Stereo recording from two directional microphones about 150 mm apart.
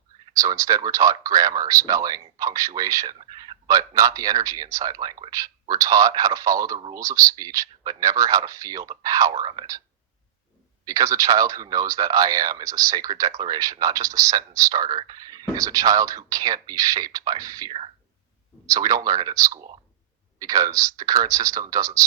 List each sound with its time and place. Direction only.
0.3 s speech: 20° right (ahead or behind)
3.2 s speech: 35° right (ahead or behind)
10.8 s speech: 25° right (ahead or behind)